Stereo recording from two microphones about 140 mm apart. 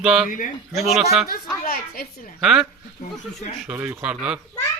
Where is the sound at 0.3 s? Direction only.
70° left (ahead or behind).